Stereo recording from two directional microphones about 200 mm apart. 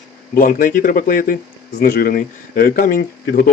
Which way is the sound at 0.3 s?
45° left (ahead or behind).